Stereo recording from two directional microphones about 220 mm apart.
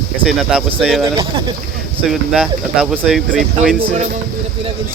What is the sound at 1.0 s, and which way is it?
Speech, 20° right (ahead or behind).